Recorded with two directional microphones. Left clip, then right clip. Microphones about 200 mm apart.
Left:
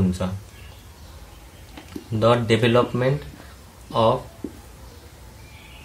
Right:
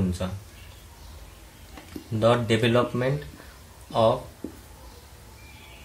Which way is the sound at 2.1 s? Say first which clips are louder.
Left 3 dB; 15° left (ahead or behind).